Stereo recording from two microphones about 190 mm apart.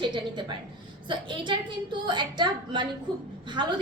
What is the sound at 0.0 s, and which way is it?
A woman's voice, 25° right (ahead or behind).